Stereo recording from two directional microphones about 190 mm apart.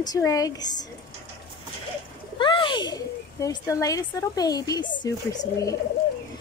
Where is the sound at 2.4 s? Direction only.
25° left (ahead or behind).